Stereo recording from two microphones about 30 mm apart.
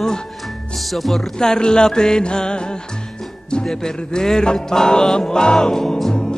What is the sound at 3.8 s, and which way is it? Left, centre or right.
Music, left.